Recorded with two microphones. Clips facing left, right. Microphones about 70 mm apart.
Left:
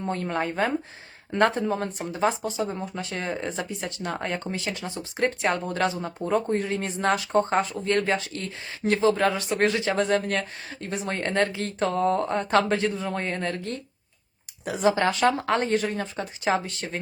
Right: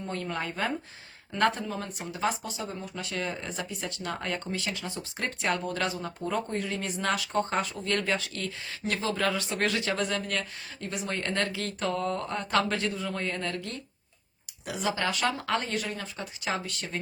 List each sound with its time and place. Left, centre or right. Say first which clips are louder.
0.1 s speech: left 6 dB; left